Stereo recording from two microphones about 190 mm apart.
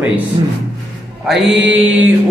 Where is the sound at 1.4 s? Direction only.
75° right (ahead or behind).